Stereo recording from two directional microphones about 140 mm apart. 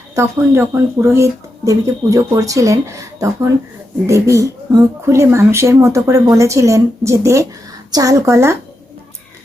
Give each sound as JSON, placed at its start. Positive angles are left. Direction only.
{"t": 0.2, "sound": "speech", "side_deg": -20}